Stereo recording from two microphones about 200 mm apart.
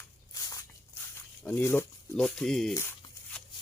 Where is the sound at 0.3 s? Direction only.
15° left (ahead or behind).